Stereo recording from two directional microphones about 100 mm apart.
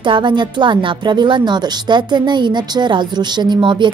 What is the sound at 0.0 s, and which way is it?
Speech, 50° right (ahead or behind).